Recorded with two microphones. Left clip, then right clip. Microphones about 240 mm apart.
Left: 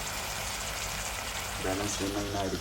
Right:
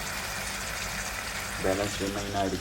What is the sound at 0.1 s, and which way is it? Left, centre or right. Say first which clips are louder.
Vehicle: right 2 dB; centre.